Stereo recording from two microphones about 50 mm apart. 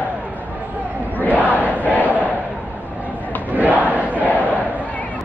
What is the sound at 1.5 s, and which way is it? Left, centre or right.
Battle cry, right.